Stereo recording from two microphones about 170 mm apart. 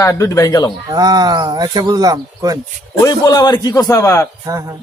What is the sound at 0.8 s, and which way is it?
Speech, 20° right (ahead or behind).